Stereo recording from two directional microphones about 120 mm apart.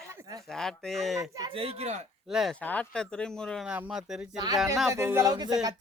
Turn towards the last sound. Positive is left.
turn(degrees=-35)  # may be behind; listen again after turning